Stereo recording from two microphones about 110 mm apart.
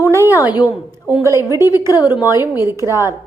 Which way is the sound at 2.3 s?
25° right (ahead or behind).